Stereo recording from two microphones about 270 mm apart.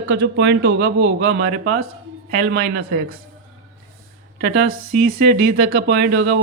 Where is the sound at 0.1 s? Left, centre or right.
Right.